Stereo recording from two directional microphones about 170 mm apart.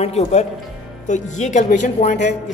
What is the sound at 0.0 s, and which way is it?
A woman's voice, 40° left (ahead or behind).